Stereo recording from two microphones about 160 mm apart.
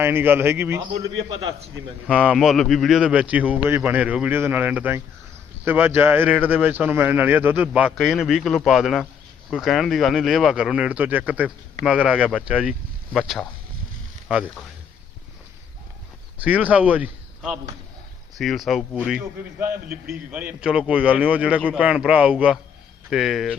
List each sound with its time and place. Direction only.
0.0 s a man's voice: 15° right (ahead or behind)
2.0 s a man's voice: 5° right (ahead or behind)
16.4 s a man's voice: 10° right (ahead or behind)
19.6 s a man's voice: 70° right (ahead or behind)
20.3 s a man's voice: 10° right (ahead or behind)